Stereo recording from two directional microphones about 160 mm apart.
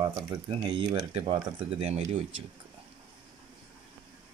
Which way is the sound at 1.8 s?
40° right (ahead or behind).